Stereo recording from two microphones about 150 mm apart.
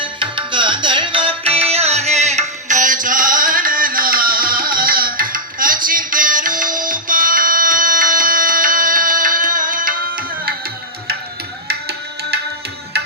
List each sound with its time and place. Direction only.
0.0 s music: 35° right (ahead or behind); by 10.5 s 65° right (ahead or behind)
11.7 s music: 90° right